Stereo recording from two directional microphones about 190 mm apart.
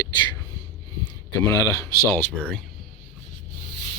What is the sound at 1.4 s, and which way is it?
Speech, 20° left (ahead or behind).